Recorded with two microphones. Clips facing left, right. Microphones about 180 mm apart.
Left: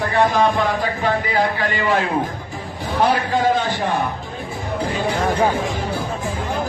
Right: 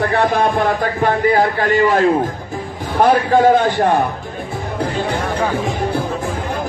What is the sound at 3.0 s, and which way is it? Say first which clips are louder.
Speech: right 6 dB; 50° right (ahead or behind).